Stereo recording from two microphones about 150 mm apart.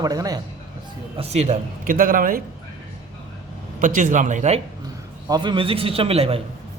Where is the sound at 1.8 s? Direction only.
65° right (ahead or behind).